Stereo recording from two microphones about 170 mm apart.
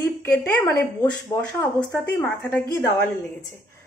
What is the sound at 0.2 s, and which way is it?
Speech, 10° left (ahead or behind).